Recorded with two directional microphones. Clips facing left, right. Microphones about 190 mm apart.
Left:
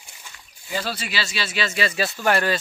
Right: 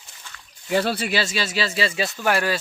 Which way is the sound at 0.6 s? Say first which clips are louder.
Right 7 dB; 60° right (ahead or behind).